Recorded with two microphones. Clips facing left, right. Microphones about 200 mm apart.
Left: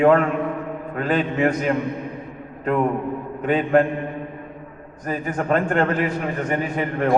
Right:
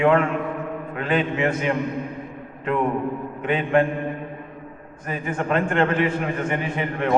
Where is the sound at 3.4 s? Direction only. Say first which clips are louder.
Left 3 dB; 40° left (ahead or behind).